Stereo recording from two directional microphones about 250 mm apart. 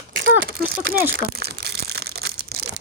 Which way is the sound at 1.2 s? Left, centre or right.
Right.